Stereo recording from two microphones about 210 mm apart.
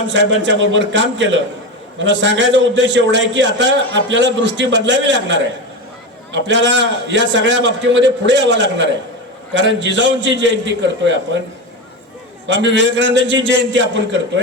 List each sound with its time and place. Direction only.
0.1 s a man's voice: 60° right (ahead or behind)
12.5 s a man's voice: 60° right (ahead or behind)